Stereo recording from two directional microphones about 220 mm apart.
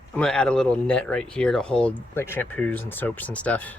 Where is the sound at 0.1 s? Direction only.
5° left (ahead or behind).